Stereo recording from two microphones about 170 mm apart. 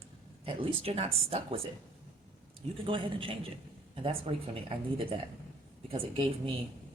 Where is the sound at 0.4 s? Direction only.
35° right (ahead or behind).